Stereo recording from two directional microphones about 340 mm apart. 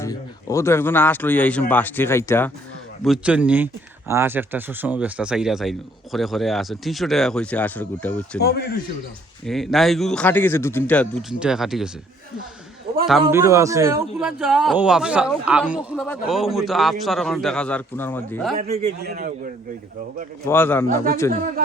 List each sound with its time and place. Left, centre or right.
0.0 s a man's voice: centre
8.4 s speech: left
9.5 s a man's voice: centre
13.1 s a man's voice: centre
18.5 s a man's voice: right
20.4 s a man's voice: centre
20.9 s a man's voice: right